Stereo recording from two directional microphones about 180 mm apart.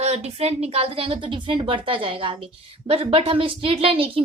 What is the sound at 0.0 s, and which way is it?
A woman's voice, 35° right (ahead or behind).